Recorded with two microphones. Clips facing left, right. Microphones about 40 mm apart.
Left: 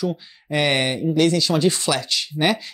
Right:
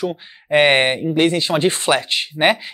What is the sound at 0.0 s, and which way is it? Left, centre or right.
Speech, right.